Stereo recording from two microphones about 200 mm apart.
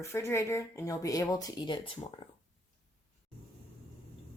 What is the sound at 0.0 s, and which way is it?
Speech, 15° left (ahead or behind).